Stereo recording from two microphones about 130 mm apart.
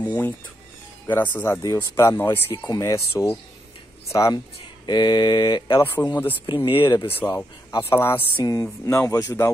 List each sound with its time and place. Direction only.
0.0 s speech: 10° left (ahead or behind)
1.3 s speech: 15° left (ahead or behind)
6.4 s speech: 35° left (ahead or behind)
7.2 s speech: 15° left (ahead or behind)